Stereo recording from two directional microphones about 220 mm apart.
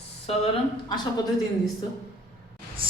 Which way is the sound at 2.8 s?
25° right (ahead or behind).